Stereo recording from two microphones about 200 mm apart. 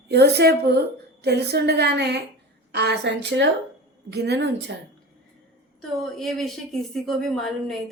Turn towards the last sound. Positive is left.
turn(degrees=0)  # may be behind; listen again after turning